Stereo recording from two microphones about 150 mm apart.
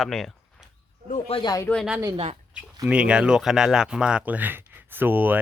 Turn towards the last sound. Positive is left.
turn(degrees=-10)  # may be behind; listen again after turning